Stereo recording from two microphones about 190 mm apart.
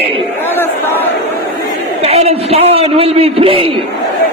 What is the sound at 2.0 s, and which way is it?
A man's voice, 35° right (ahead or behind).